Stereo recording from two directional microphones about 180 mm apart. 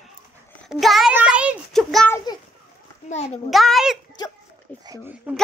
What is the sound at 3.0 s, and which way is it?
Speech, 40° left (ahead or behind).